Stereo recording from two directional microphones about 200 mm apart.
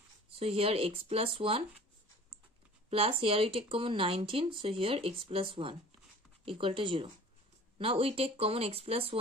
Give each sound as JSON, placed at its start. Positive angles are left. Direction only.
{"t": 0.4, "sound": "speech", "side_deg": -30}
{"t": 2.9, "sound": "speech", "side_deg": -30}